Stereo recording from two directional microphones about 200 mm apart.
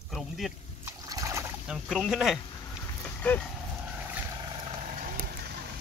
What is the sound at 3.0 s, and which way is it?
Dog, 10° left (ahead or behind).